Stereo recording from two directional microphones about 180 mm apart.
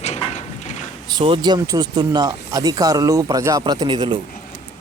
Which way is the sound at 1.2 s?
25° right (ahead or behind).